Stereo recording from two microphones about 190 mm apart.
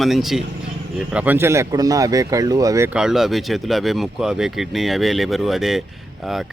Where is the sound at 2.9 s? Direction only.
5° right (ahead or behind).